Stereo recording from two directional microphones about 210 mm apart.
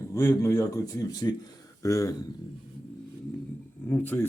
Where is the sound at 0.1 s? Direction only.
10° left (ahead or behind).